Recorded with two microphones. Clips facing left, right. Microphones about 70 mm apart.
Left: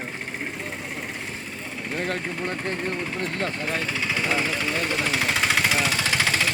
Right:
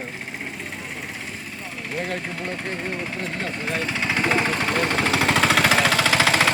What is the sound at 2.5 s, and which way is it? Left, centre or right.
Speech, centre.